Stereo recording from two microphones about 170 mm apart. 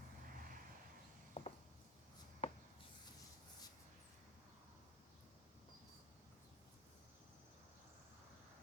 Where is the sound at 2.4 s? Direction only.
35° left (ahead or behind).